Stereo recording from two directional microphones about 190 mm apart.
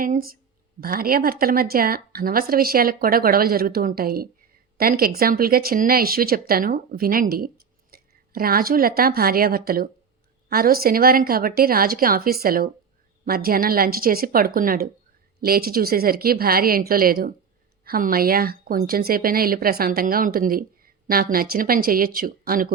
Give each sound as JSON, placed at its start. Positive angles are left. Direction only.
{"t": 0.0, "sound": "speech", "side_deg": -50}